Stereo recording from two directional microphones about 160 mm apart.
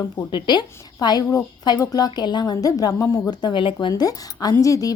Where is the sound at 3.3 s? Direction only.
25° left (ahead or behind).